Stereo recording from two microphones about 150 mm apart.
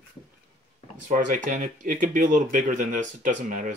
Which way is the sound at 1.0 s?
60° right (ahead or behind).